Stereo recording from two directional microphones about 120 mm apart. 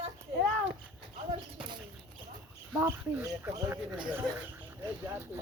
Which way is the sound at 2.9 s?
30° right (ahead or behind).